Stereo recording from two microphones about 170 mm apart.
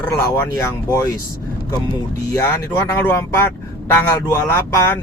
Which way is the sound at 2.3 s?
15° left (ahead or behind).